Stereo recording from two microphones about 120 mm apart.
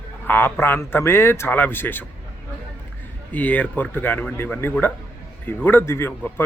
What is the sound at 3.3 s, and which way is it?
A man's voice, 10° left (ahead or behind).